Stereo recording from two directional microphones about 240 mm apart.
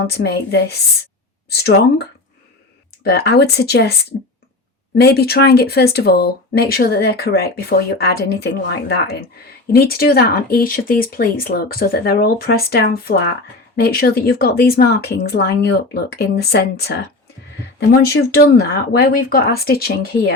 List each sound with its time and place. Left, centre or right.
0.0 s a woman's voice: left
4.9 s a woman's voice: left